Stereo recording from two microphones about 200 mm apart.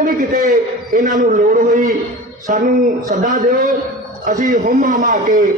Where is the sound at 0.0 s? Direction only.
40° right (ahead or behind).